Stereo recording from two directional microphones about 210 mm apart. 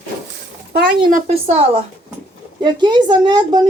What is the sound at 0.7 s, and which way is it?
A woman's voice, 40° right (ahead or behind).